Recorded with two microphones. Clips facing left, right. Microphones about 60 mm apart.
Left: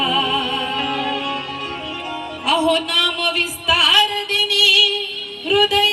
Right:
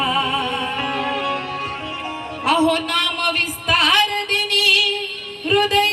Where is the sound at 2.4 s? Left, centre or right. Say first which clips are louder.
Even; right.